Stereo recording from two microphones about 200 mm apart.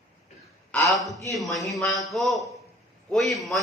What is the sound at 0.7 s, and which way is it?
A man's voice, 5° left (ahead or behind).